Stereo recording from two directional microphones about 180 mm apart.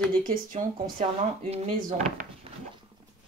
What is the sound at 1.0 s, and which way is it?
Speech, 35° right (ahead or behind).